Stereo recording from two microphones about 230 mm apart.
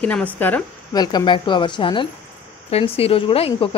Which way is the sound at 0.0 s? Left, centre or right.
Centre.